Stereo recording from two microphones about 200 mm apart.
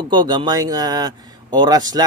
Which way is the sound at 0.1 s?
20° right (ahead or behind).